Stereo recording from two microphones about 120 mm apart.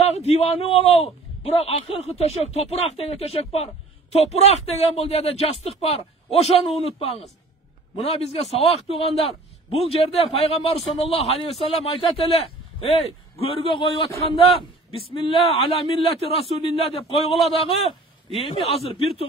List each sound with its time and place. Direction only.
0.0 s a man's voice: 60° left (ahead or behind)